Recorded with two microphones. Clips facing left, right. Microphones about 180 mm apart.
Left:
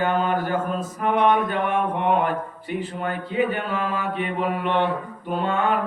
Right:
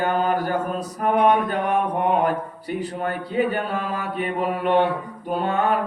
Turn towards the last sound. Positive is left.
turn(degrees=-40)  # may be behind; listen again after turning